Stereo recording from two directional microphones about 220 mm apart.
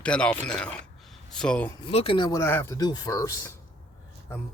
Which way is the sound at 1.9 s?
25° left (ahead or behind).